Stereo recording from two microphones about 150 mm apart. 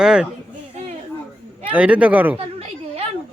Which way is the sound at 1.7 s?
10° right (ahead or behind).